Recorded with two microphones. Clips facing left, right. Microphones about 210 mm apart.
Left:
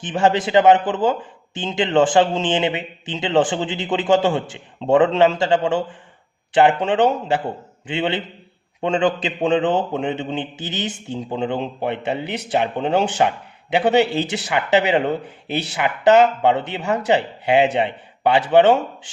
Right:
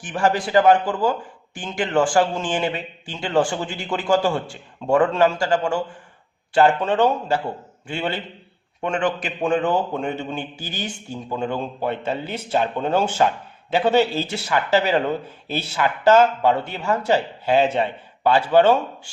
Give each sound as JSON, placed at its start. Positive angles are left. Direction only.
{"t": 0.0, "sound": "speech", "side_deg": 25}
{"t": 6.5, "sound": "speech", "side_deg": 20}